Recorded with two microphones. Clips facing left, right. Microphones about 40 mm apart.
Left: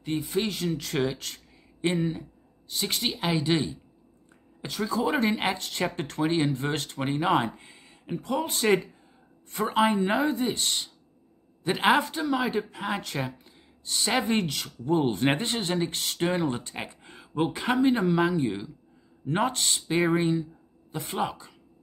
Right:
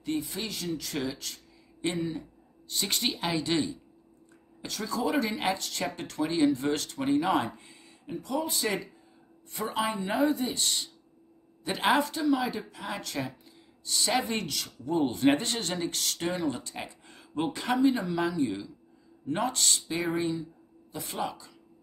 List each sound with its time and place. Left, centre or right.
0.0 s speech: left
2.7 s a woman's voice: centre
3.3 s a woman's voice: centre
5.0 s speech: left
15.4 s speech: left
17.7 s speech: left